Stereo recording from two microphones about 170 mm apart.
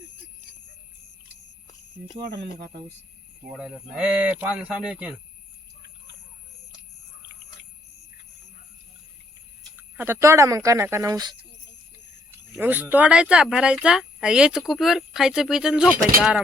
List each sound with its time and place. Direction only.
3.4 s speech: 5° right (ahead or behind)
10.0 s speech: 15° right (ahead or behind)
12.5 s speech: 10° right (ahead or behind)